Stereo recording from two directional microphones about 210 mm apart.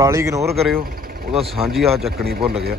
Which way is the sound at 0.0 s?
15° right (ahead or behind).